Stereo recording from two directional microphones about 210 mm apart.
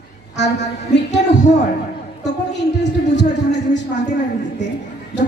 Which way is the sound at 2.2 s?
55° left (ahead or behind).